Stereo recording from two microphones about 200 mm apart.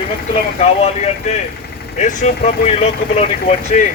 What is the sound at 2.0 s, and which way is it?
Speech, 40° left (ahead or behind).